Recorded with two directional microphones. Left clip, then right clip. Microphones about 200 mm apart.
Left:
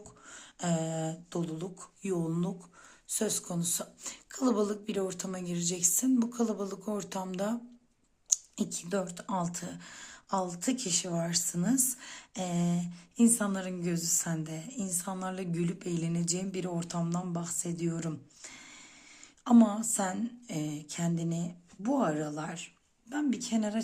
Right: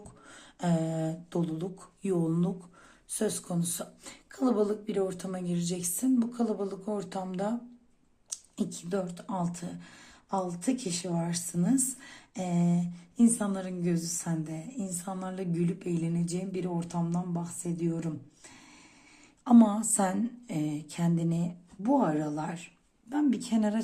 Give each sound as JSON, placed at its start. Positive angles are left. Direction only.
{"t": 0.3, "sound": "speech", "side_deg": 10}
{"t": 19.5, "sound": "a woman's voice", "side_deg": 10}